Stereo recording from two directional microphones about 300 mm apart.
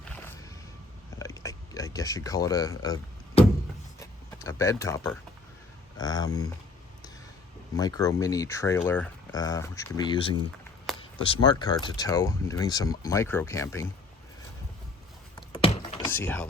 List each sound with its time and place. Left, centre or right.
0.0 s music: centre
1.2 s a sound: centre
6.0 s speech: centre
7.8 s speech: centre
15.4 s a sound: centre
16.1 s speech: centre